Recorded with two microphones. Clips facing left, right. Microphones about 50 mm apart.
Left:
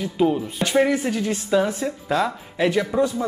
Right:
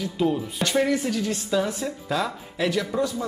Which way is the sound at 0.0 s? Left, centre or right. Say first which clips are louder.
Left 4 dB; centre.